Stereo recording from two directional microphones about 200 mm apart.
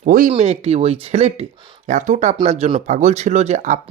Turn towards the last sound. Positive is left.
turn(degrees=-35)  # may be behind; listen again after turning